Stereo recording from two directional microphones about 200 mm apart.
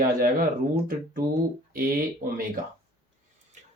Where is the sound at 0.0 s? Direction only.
45° right (ahead or behind).